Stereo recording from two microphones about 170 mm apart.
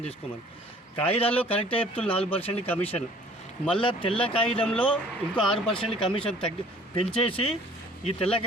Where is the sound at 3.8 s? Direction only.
30° left (ahead or behind).